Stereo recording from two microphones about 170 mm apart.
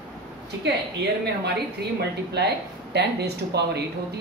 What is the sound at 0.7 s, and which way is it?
A woman's voice, 85° right.